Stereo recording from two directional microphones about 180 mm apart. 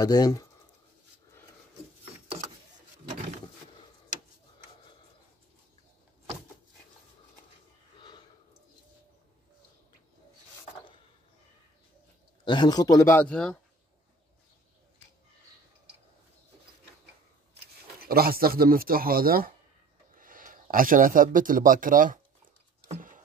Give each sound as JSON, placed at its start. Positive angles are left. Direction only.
{"t": 0.0, "sound": "speech", "side_deg": 20}
{"t": 12.4, "sound": "speech", "side_deg": 25}
{"t": 18.0, "sound": "speech", "side_deg": -55}
{"t": 22.8, "sound": "a sound", "side_deg": -45}